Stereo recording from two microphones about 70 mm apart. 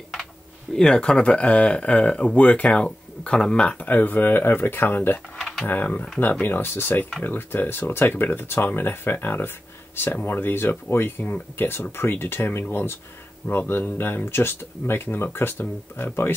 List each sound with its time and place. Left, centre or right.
0.7 s speech: centre
3.7 s speech: left